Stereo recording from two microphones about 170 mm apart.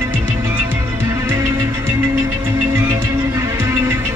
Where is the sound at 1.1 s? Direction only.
15° right (ahead or behind).